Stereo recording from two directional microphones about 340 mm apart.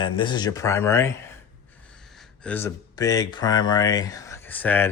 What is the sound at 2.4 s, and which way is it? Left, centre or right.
Speech, centre.